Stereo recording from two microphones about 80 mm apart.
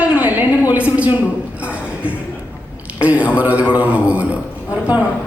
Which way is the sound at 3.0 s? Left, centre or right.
Centre.